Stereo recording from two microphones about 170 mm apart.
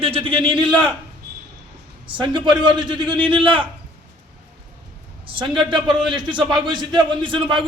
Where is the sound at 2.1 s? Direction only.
25° right (ahead or behind).